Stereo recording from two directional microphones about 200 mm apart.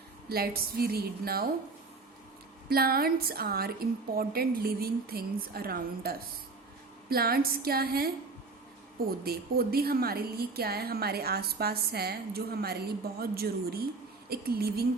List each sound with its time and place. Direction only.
0.3 s a woman's voice: 50° right (ahead or behind)
2.6 s a woman's voice: 50° right (ahead or behind)
9.2 s a woman's voice: 50° right (ahead or behind)